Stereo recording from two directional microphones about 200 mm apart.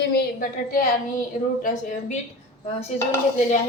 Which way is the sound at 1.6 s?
40° left (ahead or behind).